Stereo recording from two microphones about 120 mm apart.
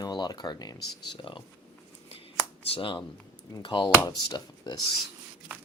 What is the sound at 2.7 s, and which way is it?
Speech, 45° left (ahead or behind).